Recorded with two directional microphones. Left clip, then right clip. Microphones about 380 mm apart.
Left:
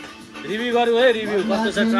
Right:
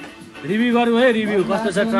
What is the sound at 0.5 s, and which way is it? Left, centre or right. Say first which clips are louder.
Speech: right 1 dB; right.